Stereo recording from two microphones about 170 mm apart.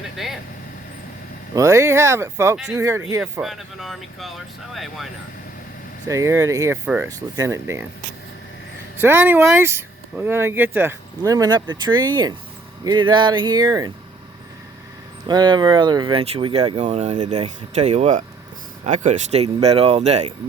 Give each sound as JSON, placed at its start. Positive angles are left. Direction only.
{"t": 0.2, "sound": "speech", "side_deg": 0}
{"t": 1.5, "sound": "speech", "side_deg": -20}
{"t": 3.4, "sound": "speech", "side_deg": 0}
{"t": 6.1, "sound": "speech", "side_deg": -15}
{"t": 9.0, "sound": "speech", "side_deg": -10}
{"t": 15.3, "sound": "speech", "side_deg": -25}